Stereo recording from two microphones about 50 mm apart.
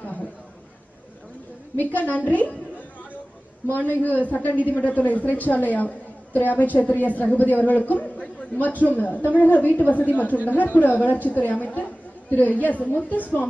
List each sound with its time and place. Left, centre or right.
2.0 s a woman's voice: left
3.7 s a woman's voice: left